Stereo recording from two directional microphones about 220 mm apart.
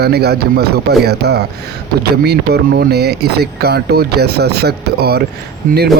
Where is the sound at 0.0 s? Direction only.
45° right (ahead or behind).